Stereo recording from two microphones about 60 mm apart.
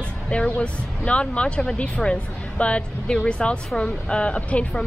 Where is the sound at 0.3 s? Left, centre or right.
Centre.